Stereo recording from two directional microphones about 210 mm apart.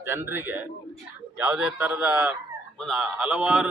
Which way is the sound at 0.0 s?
10° right (ahead or behind).